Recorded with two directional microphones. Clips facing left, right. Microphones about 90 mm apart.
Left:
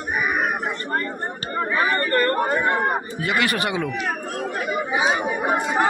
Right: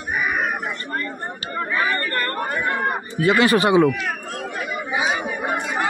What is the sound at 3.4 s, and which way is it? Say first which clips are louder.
Speech: right 9 dB; 25° right (ahead or behind).